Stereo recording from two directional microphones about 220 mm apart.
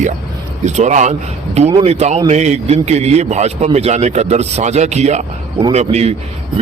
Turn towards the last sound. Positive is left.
turn(degrees=-30)  # may be behind; listen again after turning